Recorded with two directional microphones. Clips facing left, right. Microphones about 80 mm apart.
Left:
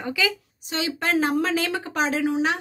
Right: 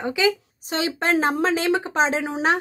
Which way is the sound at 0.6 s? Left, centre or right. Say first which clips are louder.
Right 3 dB; right.